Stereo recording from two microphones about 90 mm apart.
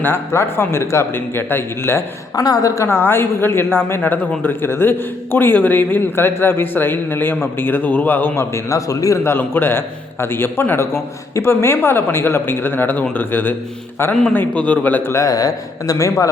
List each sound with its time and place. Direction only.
0.0 s a man's voice: 25° left (ahead or behind)
2.3 s a man's voice: 45° left (ahead or behind); by 13.6 s 20° left (ahead or behind)
14.1 s a man's voice: 5° left (ahead or behind)
14.3 s a man's voice: 15° left (ahead or behind)
15.1 s speech: 40° left (ahead or behind)